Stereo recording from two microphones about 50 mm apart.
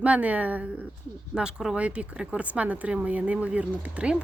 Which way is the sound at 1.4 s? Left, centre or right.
Centre.